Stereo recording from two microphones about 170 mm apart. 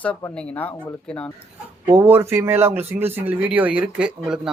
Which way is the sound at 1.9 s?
15° right (ahead or behind).